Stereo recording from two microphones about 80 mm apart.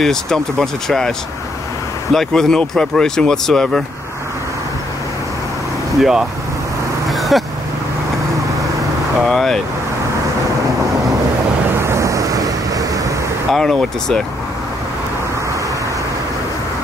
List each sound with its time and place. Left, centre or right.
0.0 s speech: centre
2.1 s speech: centre
5.9 s speech: centre
7.1 s vehicle: centre
9.2 s vehicle: centre
11.8 s vehicle: right
13.5 s speech: centre